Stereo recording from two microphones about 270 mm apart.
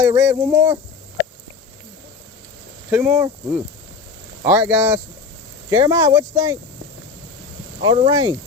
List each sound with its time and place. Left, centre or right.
0.0 s speech: centre
2.9 s speech: centre
7.8 s speech: centre